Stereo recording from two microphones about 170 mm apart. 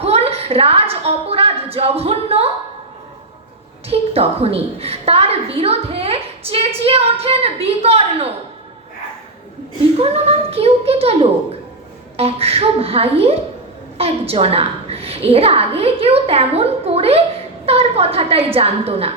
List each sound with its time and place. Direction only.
0.0 s a woman's voice: 35° right (ahead or behind)
3.8 s a woman's voice: 35° right (ahead or behind)
10.0 s a woman's voice: 35° right (ahead or behind)